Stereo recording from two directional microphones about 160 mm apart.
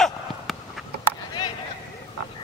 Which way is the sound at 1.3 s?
25° left (ahead or behind).